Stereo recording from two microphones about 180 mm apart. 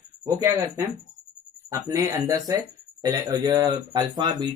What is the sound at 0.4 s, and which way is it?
Speech, 15° right (ahead or behind).